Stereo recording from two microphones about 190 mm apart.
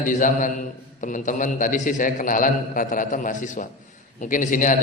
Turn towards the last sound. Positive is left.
turn(degrees=45)  # may be behind; listen again after turning